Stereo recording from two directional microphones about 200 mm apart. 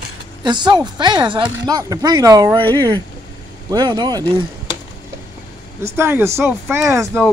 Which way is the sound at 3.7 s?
20° right (ahead or behind).